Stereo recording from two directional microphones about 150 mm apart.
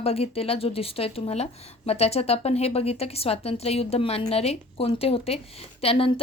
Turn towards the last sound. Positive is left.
turn(degrees=40)  # may be behind; listen again after turning